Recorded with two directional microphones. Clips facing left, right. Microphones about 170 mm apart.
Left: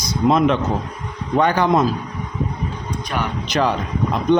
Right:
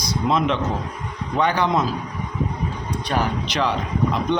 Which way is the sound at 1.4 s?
45° left (ahead or behind).